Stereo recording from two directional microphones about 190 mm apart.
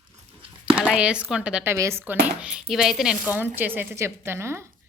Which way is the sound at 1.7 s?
15° right (ahead or behind).